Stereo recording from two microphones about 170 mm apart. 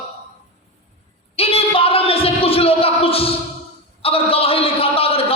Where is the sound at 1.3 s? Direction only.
35° left (ahead or behind).